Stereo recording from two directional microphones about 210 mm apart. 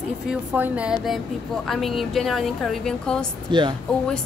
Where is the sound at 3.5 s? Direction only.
20° right (ahead or behind).